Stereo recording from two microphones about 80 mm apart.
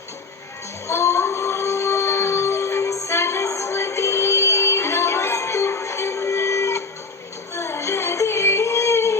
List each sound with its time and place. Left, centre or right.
0.9 s music: left